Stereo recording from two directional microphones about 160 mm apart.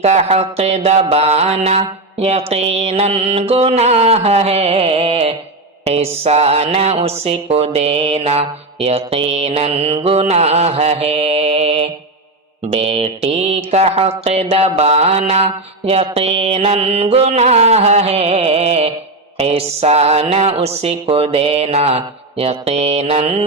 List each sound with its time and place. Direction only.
0.0 s speech: 45° right (ahead or behind)